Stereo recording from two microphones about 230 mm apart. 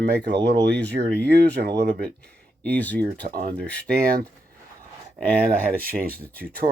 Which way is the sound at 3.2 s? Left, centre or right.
Right.